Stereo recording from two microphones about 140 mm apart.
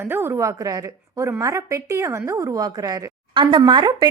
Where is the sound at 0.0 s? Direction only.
15° right (ahead or behind).